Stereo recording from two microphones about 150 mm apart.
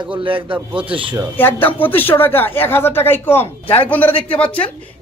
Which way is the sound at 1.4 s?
15° left (ahead or behind).